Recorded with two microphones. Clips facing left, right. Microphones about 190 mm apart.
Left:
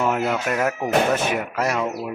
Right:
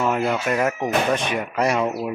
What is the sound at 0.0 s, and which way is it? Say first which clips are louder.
Music: even; 5° left (ahead or behind).